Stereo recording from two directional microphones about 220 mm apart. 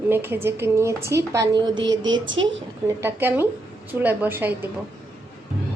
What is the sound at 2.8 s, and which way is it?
Speech, 10° right (ahead or behind).